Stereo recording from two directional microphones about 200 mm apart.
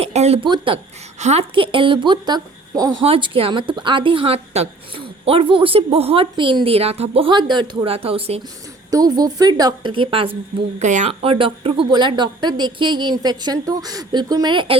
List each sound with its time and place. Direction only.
0.0 s a woman's voice: 30° right (ahead or behind)
8.9 s a woman's voice: 20° right (ahead or behind)